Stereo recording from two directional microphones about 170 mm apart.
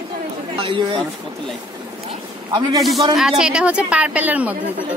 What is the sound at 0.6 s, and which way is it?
Speech, 30° right (ahead or behind).